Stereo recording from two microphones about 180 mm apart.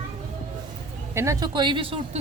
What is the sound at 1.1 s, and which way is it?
Speech, 15° right (ahead or behind).